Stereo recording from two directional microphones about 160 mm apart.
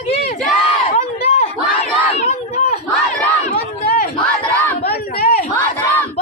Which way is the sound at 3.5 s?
70° left (ahead or behind).